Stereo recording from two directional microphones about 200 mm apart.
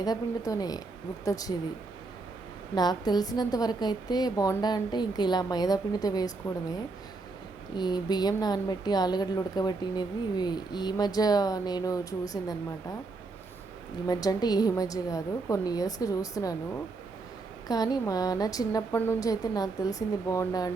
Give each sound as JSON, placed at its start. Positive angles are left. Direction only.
{"t": 0.0, "sound": "a woman's voice", "side_deg": 20}
{"t": 2.7, "sound": "a woman's voice", "side_deg": 20}
{"t": 7.8, "sound": "a woman's voice", "side_deg": 20}
{"t": 14.1, "sound": "speech", "side_deg": 20}
{"t": 17.7, "sound": "speech", "side_deg": 20}